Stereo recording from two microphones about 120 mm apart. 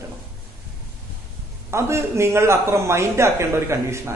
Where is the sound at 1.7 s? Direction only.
20° right (ahead or behind).